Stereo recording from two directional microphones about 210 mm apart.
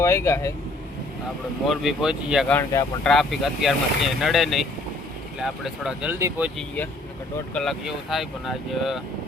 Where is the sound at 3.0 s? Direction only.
Centre (ahead or behind).